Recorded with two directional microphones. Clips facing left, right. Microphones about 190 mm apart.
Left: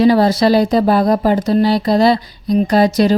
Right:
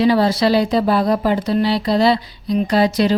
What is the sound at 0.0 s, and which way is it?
Speech, 45° left (ahead or behind).